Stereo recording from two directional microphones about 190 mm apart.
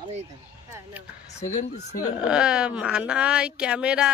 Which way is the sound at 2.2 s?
5° right (ahead or behind).